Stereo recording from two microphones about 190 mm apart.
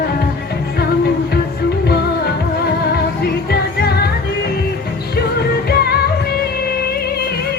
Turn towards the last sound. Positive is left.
turn(degrees=55)  # may be behind; listen again after turning